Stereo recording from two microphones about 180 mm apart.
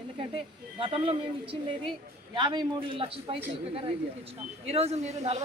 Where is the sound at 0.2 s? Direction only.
30° right (ahead or behind).